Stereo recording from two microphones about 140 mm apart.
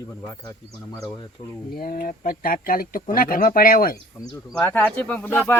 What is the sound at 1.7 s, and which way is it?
Speech, 90° left.